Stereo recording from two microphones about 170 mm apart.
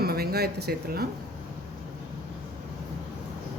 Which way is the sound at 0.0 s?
65° right (ahead or behind).